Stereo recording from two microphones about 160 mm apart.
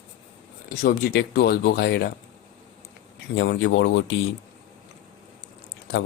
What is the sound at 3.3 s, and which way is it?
Speech, 90° left.